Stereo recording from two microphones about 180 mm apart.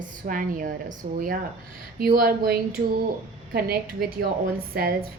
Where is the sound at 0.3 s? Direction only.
50° right (ahead or behind).